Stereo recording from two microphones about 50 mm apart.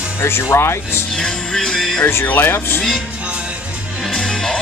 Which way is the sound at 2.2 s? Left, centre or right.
Left.